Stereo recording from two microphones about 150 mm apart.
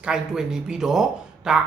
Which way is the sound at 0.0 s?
5° right (ahead or behind).